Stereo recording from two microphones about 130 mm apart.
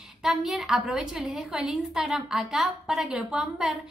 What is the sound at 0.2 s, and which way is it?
A woman's voice, 5° right (ahead or behind).